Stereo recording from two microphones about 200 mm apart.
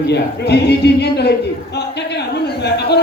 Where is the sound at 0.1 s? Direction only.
55° left (ahead or behind).